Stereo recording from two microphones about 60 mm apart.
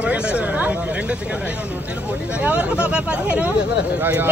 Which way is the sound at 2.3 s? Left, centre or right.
Right.